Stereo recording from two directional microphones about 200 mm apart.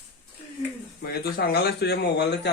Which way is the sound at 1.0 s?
50° left (ahead or behind).